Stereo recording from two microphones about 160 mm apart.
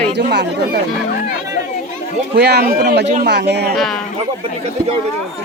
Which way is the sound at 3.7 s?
Centre (ahead or behind).